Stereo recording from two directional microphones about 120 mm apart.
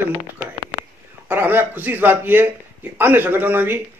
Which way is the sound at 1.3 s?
15° right (ahead or behind).